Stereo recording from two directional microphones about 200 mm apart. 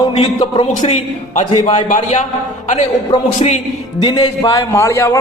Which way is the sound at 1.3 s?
40° left (ahead or behind).